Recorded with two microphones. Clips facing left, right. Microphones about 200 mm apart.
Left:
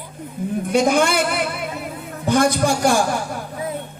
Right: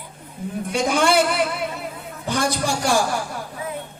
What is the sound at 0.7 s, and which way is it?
Speech, 50° left (ahead or behind).